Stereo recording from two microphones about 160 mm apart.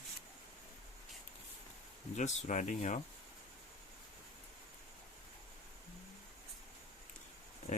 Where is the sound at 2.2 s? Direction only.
50° left (ahead or behind).